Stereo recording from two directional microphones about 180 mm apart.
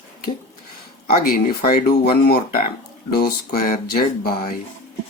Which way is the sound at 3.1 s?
60° left (ahead or behind).